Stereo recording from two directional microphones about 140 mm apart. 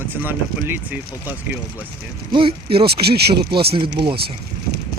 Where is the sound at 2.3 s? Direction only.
40° right (ahead or behind).